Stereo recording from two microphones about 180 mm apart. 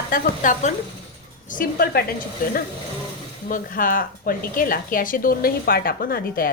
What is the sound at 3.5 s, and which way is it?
Speech, 50° left (ahead or behind).